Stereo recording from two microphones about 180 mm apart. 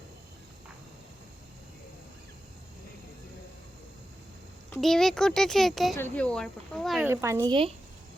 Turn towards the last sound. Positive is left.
turn(degrees=-25)  # may be behind; listen again after turning